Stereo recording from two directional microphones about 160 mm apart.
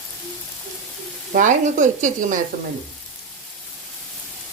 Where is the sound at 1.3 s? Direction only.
50° right (ahead or behind).